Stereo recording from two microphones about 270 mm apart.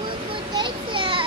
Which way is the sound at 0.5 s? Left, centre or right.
Centre.